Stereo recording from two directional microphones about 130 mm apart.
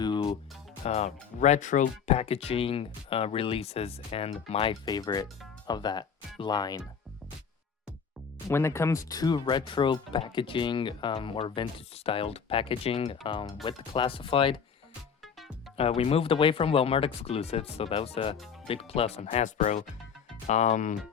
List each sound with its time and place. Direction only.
0.0 s music: 40° left (ahead or behind)
0.9 s speech: 55° left (ahead or behind); by 2.1 s 75° left (ahead or behind)
2.1 s speech: 50° left (ahead or behind)
4.9 s speech: 30° left (ahead or behind)
8.4 s speech: 20° left (ahead or behind); by 14.6 s 40° left (ahead or behind)
15.8 s speech: 50° left (ahead or behind); by 20.9 s 65° left (ahead or behind)